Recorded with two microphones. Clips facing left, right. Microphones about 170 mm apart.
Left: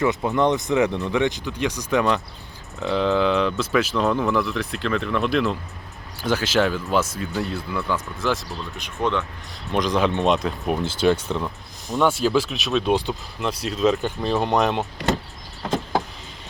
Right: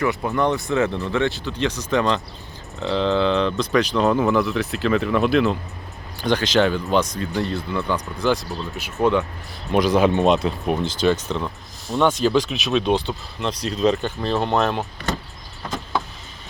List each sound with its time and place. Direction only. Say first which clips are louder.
0.0 s speech: left 1 dB; 20° left (ahead or behind); by 8.9 s centre (ahead or behind)
9.0 s speech: right 5 dB; 10° right (ahead or behind)
14.0 s speech: even; 15° left (ahead or behind)
15.7 s vehicle: left 3 dB; 35° left (ahead or behind)